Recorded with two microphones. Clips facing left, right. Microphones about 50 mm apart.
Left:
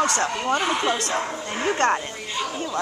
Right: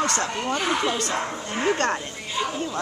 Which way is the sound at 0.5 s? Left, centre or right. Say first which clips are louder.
Even; centre.